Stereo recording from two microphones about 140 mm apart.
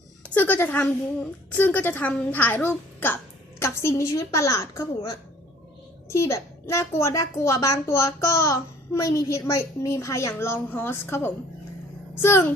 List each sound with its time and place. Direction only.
0.3 s a woman's voice: 15° left (ahead or behind)
6.1 s a woman's voice: 20° left (ahead or behind)